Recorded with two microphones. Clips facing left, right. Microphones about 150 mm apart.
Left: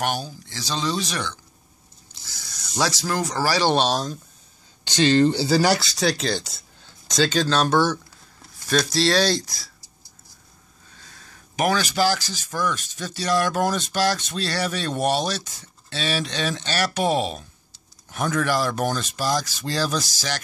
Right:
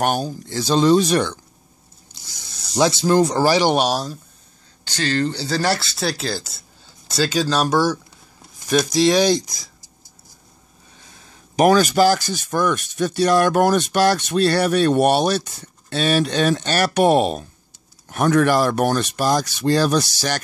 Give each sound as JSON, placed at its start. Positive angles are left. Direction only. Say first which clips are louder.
{"t": 0.0, "sound": "speech", "louder": "right 6 dB", "side_deg": -50}
{"t": 2.2, "sound": "speech", "louder": "even", "side_deg": -20}
{"t": 4.8, "sound": "speech", "louder": "left 4 dB", "side_deg": 20}
{"t": 11.0, "sound": "a sound", "louder": "right 1 dB", "side_deg": -15}
{"t": 11.5, "sound": "speech", "louder": "right 8 dB", "side_deg": -45}